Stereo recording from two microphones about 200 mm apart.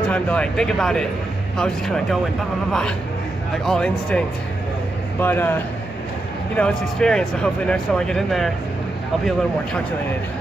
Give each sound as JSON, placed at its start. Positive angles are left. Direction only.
{"t": 0.1, "sound": "speech", "side_deg": 5}
{"t": 3.6, "sound": "speech", "side_deg": 5}
{"t": 5.2, "sound": "speech", "side_deg": 10}